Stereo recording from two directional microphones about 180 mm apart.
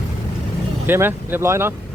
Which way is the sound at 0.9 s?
10° right (ahead or behind).